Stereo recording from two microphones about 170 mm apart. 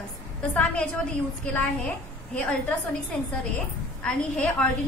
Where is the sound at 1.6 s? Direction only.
10° left (ahead or behind).